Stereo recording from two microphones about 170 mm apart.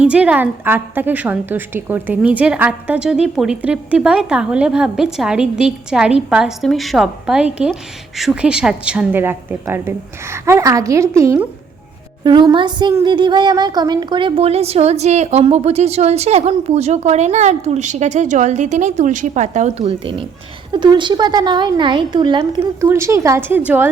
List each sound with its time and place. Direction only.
0.0 s a woman's voice: 5° right (ahead or behind)
12.2 s a woman's voice: 25° right (ahead or behind)
22.6 s a woman's voice: 15° right (ahead or behind)